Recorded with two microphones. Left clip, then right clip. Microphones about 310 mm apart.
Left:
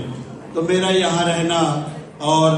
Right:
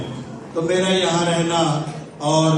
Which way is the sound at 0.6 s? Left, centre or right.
Left.